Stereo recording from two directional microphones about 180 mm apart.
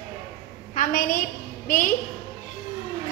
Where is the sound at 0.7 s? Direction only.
50° left (ahead or behind).